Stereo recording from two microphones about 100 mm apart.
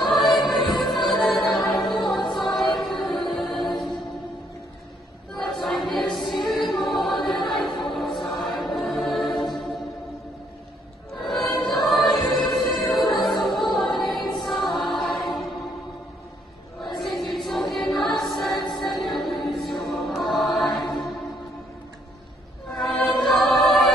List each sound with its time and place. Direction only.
0.2 s music: centre (ahead or behind)
5.4 s a sound: centre (ahead or behind)
6.3 s music: centre (ahead or behind)
11.2 s music: centre (ahead or behind)
16.8 s choir: centre (ahead or behind)
18.8 s music: centre (ahead or behind)
22.8 s choir: centre (ahead or behind)